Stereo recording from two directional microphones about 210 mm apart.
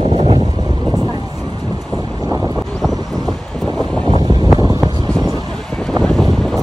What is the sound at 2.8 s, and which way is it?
Vehicle, centre (ahead or behind).